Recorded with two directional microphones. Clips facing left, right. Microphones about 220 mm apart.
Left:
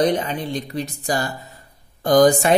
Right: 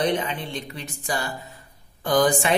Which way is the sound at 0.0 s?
40° left (ahead or behind).